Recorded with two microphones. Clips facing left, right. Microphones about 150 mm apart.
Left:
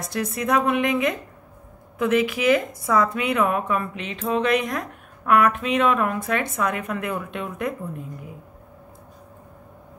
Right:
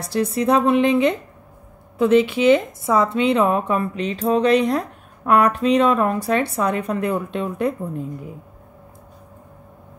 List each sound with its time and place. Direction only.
0.0 s speech: 30° right (ahead or behind)